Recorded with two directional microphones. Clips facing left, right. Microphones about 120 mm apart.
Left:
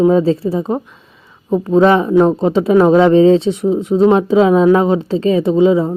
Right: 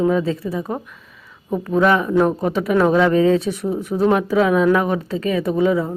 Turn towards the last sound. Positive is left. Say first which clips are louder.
# left 6 dB
turn(degrees=25)  # may be behind; listen again after turning